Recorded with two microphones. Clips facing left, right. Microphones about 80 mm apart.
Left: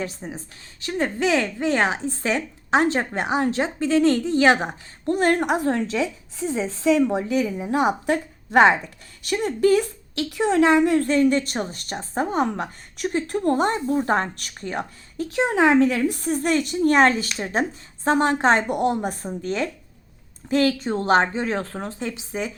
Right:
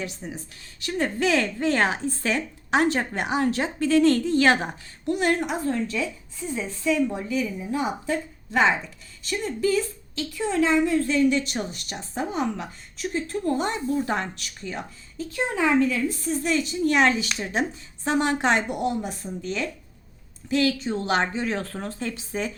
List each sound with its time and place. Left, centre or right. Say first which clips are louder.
0.0 s a woman's voice: left 3 dB; left
5.0 s a woman's voice: left 4 dB; left
15.3 s a woman's voice: left 5 dB; left
18.8 s a woman's voice: left 4 dB; left; by 22.5 s centre